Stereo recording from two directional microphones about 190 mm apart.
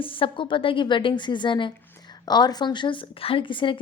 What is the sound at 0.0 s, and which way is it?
Speech, 30° left (ahead or behind).